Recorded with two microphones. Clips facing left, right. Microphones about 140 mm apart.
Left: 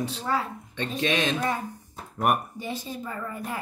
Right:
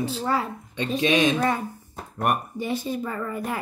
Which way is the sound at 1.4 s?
70° right (ahead or behind).